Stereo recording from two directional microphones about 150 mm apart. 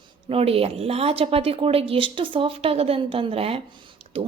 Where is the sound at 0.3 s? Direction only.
40° right (ahead or behind).